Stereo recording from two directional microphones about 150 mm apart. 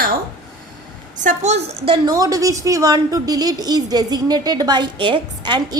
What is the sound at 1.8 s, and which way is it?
Speech, 35° right (ahead or behind).